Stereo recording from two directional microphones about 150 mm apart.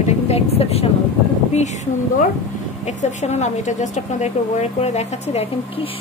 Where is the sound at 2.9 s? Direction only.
50° left (ahead or behind).